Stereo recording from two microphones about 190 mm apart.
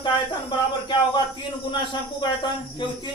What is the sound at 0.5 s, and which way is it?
Speech, 25° left (ahead or behind).